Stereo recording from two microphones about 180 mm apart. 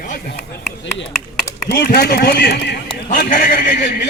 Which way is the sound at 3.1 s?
45° left (ahead or behind).